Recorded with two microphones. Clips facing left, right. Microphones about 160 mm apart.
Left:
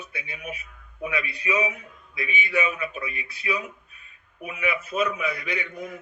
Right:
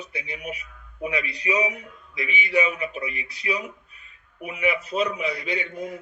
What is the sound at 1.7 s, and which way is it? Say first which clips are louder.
Speech: right 2 dB; 20° right (ahead or behind).